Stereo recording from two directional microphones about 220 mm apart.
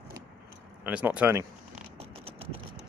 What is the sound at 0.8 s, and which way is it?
Speech, 5° right (ahead or behind).